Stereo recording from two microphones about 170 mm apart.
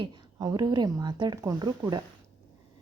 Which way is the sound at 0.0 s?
25° right (ahead or behind).